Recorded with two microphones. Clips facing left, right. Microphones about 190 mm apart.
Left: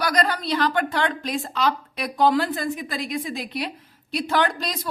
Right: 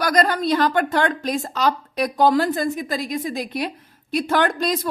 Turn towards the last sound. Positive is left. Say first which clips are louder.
# right 3 dB
turn(degrees=-50)  # may be behind; listen again after turning